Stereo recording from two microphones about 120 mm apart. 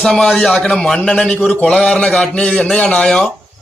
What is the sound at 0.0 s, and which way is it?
A man's voice, 5° left (ahead or behind).